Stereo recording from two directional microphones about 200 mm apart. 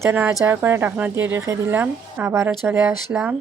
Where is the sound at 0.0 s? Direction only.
10° right (ahead or behind).